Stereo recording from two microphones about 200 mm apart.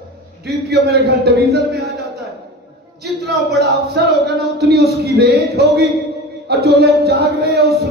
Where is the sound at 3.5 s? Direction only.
55° right (ahead or behind).